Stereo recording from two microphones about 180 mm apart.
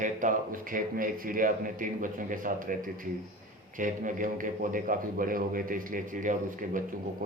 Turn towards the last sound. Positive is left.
turn(degrees=-50)  # may be behind; listen again after turning